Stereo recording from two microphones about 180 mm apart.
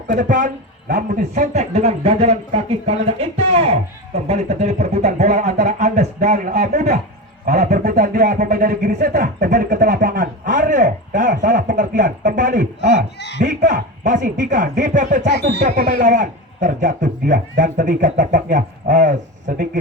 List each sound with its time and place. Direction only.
0.1 s a man's voice: 45° right (ahead or behind)
7.8 s speech: 55° right (ahead or behind)
13.1 s speech: 70° left (ahead or behind)
13.4 s speech: 45° right (ahead or behind)